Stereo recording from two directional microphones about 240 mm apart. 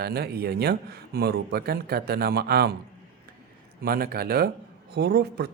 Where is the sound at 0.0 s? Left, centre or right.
Right.